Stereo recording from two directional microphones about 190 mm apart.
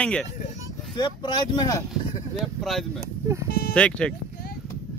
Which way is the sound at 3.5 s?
55° left (ahead or behind).